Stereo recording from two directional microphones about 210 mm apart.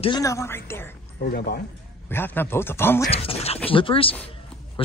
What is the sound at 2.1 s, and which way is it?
Speech, 10° left (ahead or behind).